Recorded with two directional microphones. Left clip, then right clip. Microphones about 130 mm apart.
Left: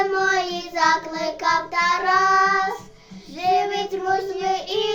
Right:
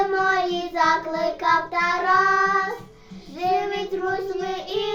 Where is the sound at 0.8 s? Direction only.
5° left (ahead or behind).